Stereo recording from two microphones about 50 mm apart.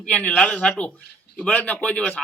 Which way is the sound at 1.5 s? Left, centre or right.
Left.